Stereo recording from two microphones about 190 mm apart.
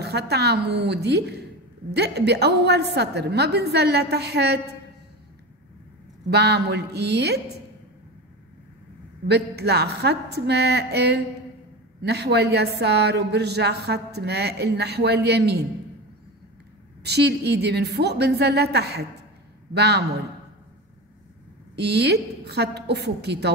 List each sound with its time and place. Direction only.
0.0 s speech: 60° right (ahead or behind)
6.3 s speech: 60° right (ahead or behind)
9.3 s speech: 60° right (ahead or behind)
17.0 s speech: 60° right (ahead or behind)
21.7 s speech: 60° right (ahead or behind)